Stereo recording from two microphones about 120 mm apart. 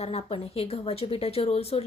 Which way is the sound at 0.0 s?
55° left (ahead or behind).